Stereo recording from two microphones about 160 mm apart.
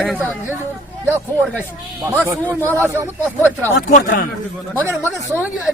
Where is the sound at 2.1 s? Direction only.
10° right (ahead or behind).